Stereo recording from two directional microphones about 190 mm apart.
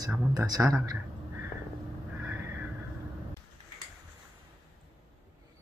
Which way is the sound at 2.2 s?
10° right (ahead or behind).